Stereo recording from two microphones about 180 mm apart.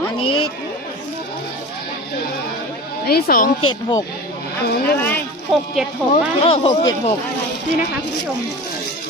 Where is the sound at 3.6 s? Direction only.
20° left (ahead or behind).